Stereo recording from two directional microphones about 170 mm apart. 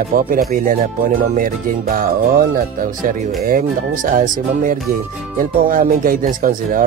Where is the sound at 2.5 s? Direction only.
50° right (ahead or behind).